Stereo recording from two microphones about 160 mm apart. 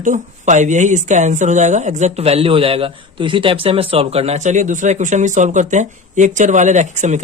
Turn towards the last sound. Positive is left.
turn(degrees=-50)  # may be behind; listen again after turning